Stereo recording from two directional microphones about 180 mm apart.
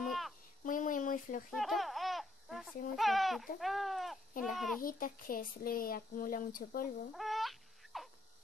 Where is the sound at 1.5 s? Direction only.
Centre (ahead or behind).